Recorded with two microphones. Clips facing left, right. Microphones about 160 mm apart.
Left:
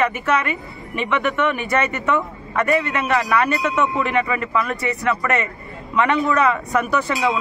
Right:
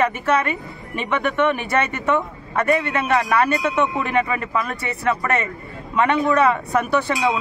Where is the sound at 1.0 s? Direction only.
50° right (ahead or behind).